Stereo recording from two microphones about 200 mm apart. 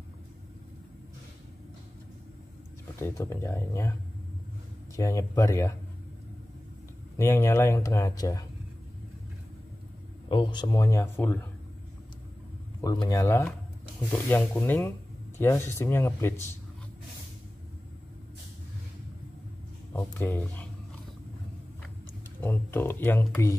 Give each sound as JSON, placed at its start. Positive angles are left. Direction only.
{"t": 3.0, "sound": "speech", "side_deg": 15}
{"t": 4.9, "sound": "speech", "side_deg": 15}
{"t": 7.2, "sound": "speech", "side_deg": 15}
{"t": 10.2, "sound": "speech", "side_deg": 25}
{"t": 12.8, "sound": "speech", "side_deg": 20}
{"t": 19.9, "sound": "speech", "side_deg": 10}
{"t": 22.4, "sound": "speech", "side_deg": 10}